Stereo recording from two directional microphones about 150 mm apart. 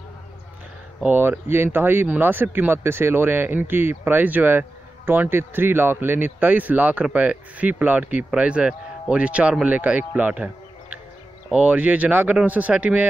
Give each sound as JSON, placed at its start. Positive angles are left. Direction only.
{"t": 1.0, "sound": "speech", "side_deg": -10}